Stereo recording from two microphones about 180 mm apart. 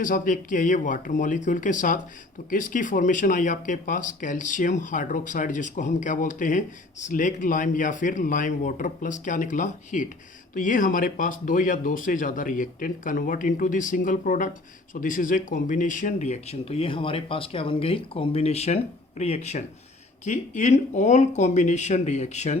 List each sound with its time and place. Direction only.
0.0 s speech: 50° left (ahead or behind)